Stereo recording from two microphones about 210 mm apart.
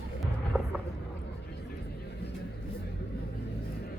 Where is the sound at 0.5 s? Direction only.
5° right (ahead or behind).